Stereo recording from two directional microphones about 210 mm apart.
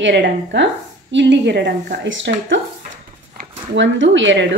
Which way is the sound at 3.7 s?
60° right (ahead or behind).